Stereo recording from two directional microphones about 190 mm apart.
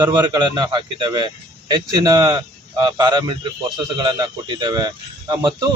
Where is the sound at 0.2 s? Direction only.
20° right (ahead or behind).